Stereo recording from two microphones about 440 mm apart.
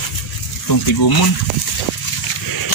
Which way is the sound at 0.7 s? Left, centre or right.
Left.